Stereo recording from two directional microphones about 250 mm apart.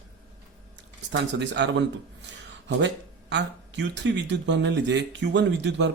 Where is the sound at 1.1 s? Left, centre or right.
Right.